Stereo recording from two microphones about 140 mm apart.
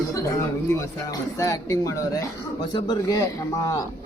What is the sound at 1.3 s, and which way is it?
Speech, 25° left (ahead or behind).